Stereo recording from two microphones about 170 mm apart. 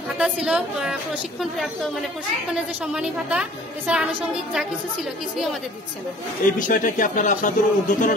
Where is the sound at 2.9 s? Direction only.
5° right (ahead or behind).